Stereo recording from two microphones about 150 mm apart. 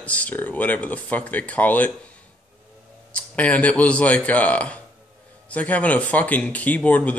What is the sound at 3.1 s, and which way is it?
Speech, 10° left (ahead or behind).